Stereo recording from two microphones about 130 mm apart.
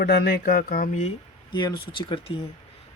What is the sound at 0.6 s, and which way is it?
Speech, 80° left.